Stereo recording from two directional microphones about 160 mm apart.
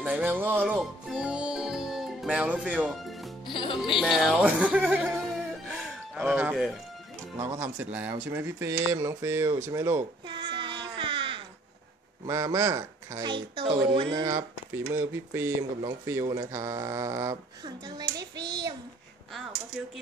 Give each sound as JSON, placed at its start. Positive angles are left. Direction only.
{"t": 0.0, "sound": "speech", "side_deg": -10}
{"t": 6.1, "sound": "speech", "side_deg": -10}
{"t": 7.3, "sound": "speech", "side_deg": -20}
{"t": 10.2, "sound": "child singing", "side_deg": -30}
{"t": 12.3, "sound": "speech", "side_deg": -20}